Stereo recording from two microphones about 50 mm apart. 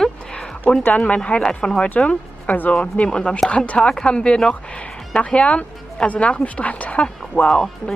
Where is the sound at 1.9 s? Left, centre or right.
Left.